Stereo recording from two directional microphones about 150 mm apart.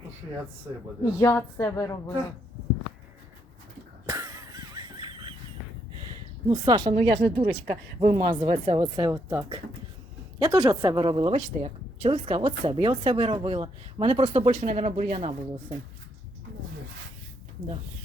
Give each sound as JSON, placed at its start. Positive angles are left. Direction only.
{"t": 1.2, "sound": "a sound", "side_deg": 20}
{"t": 4.0, "sound": "cough", "side_deg": -20}
{"t": 6.5, "sound": "speech", "side_deg": -25}
{"t": 8.4, "sound": "speech", "side_deg": -45}
{"t": 8.8, "sound": "speech", "side_deg": -25}